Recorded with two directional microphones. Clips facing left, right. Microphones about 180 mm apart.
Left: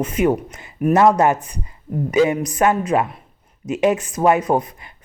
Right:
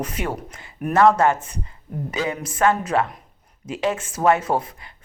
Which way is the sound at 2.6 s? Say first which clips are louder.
Left 1 dB; 15° left (ahead or behind).